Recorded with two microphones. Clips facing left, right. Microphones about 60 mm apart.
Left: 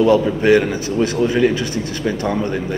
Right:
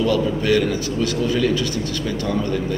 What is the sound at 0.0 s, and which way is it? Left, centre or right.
A man's voice, left.